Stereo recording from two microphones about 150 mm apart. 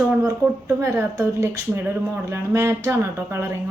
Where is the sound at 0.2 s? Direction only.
20° right (ahead or behind).